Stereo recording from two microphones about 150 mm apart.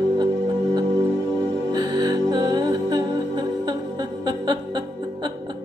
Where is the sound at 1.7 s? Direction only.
25° right (ahead or behind).